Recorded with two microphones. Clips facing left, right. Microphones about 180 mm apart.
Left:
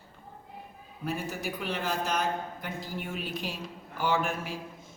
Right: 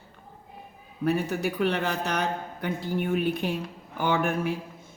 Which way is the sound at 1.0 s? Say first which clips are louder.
Right 8 dB; 65° right (ahead or behind).